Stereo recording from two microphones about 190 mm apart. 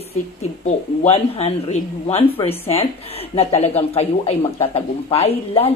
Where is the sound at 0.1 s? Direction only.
35° left (ahead or behind).